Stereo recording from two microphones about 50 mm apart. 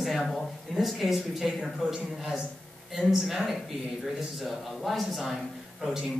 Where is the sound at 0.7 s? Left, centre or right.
Centre.